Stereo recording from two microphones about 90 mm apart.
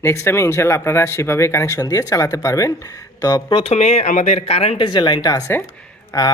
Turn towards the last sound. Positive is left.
turn(degrees=35)  # may be behind; listen again after turning